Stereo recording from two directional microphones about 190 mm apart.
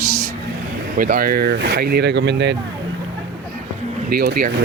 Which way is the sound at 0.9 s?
50° right (ahead or behind).